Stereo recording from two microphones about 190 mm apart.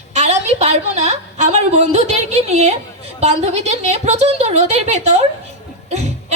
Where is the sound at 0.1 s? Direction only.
35° right (ahead or behind).